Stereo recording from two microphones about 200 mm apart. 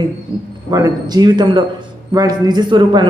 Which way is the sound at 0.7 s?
20° right (ahead or behind).